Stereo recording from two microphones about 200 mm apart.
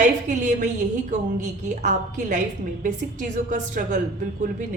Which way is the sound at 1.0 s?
40° right (ahead or behind).